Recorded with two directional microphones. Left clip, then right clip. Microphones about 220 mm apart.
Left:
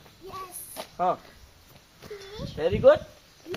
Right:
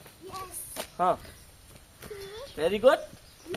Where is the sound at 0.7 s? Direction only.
50° right (ahead or behind).